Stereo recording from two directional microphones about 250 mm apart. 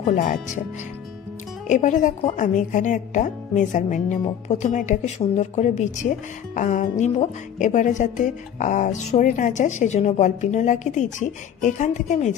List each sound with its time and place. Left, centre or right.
0.0 s speech: left
1.6 s a woman's voice: left